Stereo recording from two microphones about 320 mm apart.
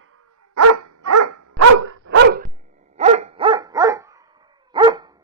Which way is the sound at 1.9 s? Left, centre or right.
Right.